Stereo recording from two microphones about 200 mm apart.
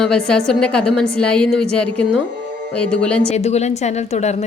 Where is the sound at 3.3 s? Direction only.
35° left (ahead or behind).